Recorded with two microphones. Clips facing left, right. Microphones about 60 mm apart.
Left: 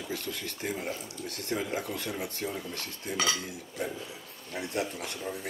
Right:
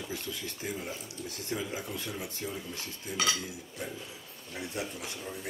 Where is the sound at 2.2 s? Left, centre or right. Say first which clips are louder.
Left 3 dB; left.